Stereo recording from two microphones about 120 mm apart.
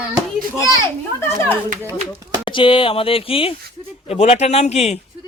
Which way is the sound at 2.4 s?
45° left (ahead or behind).